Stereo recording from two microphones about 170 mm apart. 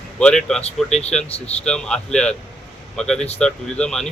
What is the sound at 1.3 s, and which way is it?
Speech, 35° left (ahead or behind).